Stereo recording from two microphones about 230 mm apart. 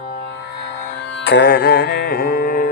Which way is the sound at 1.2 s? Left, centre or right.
Left.